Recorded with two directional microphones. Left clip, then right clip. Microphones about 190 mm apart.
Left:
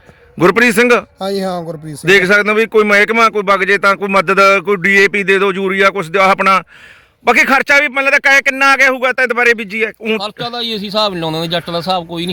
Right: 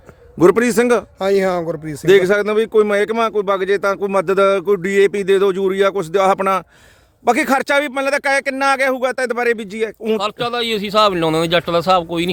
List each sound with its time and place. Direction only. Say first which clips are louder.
0.3 s speech: left 3 dB; 5° left (ahead or behind)
1.2 s speech: right 2 dB; 25° right (ahead or behind)
2.0 s a man's voice: left 3 dB; 10° left (ahead or behind)
10.4 s speech: right 1 dB; 25° right (ahead or behind)